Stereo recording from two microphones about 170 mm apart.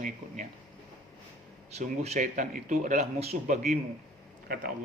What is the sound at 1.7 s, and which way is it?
Speech, 40° right (ahead or behind).